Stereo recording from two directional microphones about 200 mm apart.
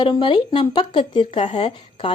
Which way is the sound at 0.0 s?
25° left (ahead or behind).